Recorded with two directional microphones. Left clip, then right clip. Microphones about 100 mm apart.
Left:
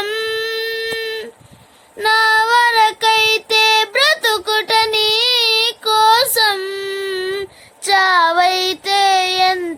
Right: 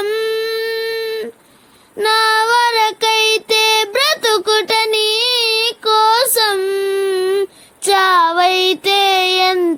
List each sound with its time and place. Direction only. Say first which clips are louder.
0.0 s a sound: right 2 dB; 10° right (ahead or behind)
2.0 s child singing: even; 30° right (ahead or behind); by 7.4 s 10° right (ahead or behind)
7.9 s child singing: right 1 dB; 35° right (ahead or behind)